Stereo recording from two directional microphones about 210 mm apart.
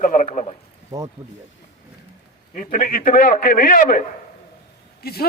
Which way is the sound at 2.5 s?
40° left (ahead or behind).